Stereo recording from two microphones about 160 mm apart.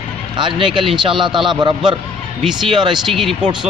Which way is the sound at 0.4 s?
30° right (ahead or behind).